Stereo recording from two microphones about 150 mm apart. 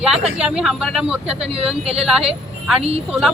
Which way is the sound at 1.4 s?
45° right (ahead or behind).